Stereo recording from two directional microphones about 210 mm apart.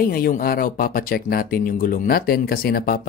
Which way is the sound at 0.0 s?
45° left (ahead or behind).